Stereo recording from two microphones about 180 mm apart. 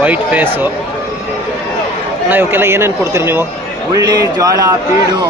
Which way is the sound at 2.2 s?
10° right (ahead or behind).